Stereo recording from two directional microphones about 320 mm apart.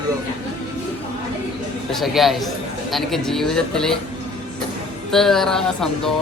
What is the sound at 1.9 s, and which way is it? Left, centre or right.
A man's voice, centre.